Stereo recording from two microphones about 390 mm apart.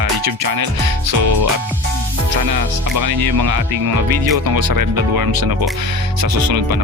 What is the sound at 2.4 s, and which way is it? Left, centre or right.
Speech, right.